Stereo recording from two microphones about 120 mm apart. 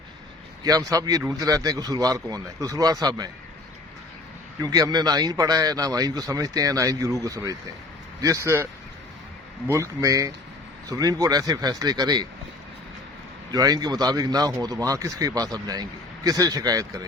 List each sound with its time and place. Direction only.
0.6 s speech: 30° right (ahead or behind)
4.6 s speech: 30° right (ahead or behind)
9.7 s speech: 25° right (ahead or behind)
13.5 s speech: 30° right (ahead or behind)